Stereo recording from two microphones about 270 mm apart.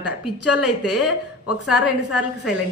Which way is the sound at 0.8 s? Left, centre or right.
Centre.